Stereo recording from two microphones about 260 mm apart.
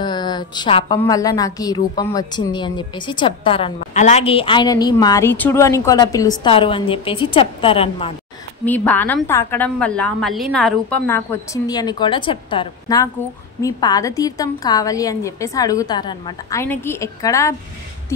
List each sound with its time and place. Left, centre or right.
0.0 s a woman's voice: centre
8.6 s a woman's voice: centre